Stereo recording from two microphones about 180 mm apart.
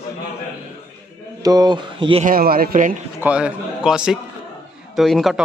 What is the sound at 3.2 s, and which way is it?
Speech, 5° right (ahead or behind).